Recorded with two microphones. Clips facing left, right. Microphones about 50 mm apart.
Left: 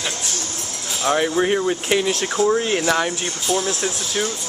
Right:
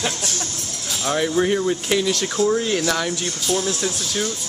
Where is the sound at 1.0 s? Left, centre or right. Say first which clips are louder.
Left 1 dB; centre.